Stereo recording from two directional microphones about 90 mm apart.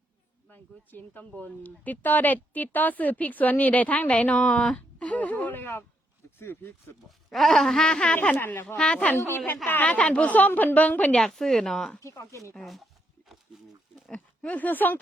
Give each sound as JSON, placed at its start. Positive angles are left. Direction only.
{"t": 0.5, "sound": "a woman's voice", "side_deg": 20}
{"t": 7.3, "sound": "speech", "side_deg": 0}
{"t": 8.4, "sound": "speech", "side_deg": 25}
{"t": 8.6, "sound": "a woman's voice", "side_deg": 10}
{"t": 9.1, "sound": "a woman's voice", "side_deg": 25}
{"t": 11.2, "sound": "speech", "side_deg": 5}
{"t": 12.0, "sound": "speech", "side_deg": 35}
{"t": 12.5, "sound": "speech", "side_deg": 0}
{"t": 14.1, "sound": "speech", "side_deg": 15}